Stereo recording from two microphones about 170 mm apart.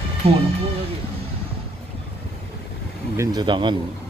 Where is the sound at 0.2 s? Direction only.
35° right (ahead or behind).